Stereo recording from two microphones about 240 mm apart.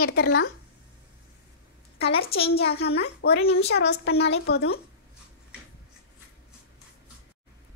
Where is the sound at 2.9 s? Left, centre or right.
Left.